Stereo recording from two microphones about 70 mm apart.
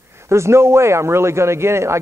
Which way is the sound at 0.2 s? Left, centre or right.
Right.